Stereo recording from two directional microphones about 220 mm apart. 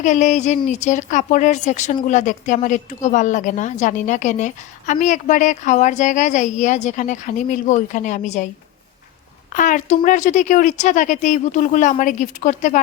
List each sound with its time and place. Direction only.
0.0 s a woman's voice: 35° left (ahead or behind)
9.5 s a woman's voice: 35° left (ahead or behind)